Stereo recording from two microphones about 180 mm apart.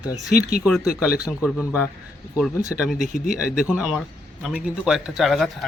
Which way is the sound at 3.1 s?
50° left (ahead or behind).